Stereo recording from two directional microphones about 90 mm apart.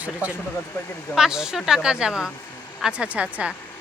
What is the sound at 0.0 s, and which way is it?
A woman's voice, 15° right (ahead or behind).